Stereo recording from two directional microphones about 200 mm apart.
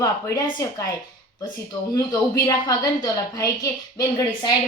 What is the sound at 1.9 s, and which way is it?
A woman's voice, 15° left (ahead or behind).